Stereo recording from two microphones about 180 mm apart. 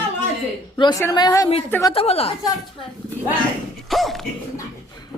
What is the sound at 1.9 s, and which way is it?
Speech, 35° left (ahead or behind).